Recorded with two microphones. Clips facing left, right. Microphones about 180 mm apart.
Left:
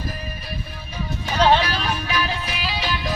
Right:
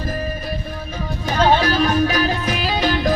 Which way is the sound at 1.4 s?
45° right (ahead or behind).